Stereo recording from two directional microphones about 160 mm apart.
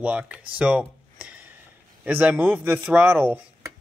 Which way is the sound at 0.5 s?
5° right (ahead or behind).